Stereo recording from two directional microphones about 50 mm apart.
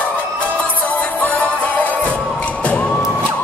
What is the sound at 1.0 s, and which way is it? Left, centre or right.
Music, left.